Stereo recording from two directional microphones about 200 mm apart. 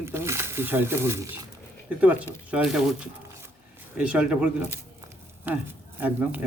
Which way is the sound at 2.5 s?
5° right (ahead or behind).